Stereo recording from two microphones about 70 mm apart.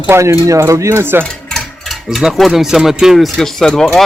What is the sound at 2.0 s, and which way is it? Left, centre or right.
Speech, centre.